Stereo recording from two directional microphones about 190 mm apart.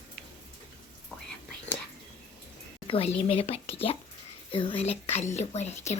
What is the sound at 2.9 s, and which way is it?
Speech, 30° left (ahead or behind).